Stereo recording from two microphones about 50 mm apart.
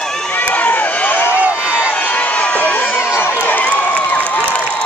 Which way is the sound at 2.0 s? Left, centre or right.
Left.